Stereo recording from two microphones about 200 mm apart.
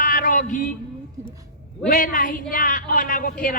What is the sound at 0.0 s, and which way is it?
Music, 45° left (ahead or behind).